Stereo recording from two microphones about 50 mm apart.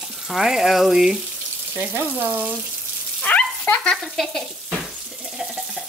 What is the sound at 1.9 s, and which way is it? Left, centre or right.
Speech, right.